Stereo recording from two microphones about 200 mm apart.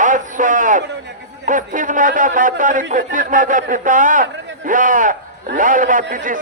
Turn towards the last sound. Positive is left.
turn(degrees=-40)  # may be behind; listen again after turning